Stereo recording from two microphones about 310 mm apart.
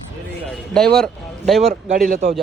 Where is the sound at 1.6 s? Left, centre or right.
Centre.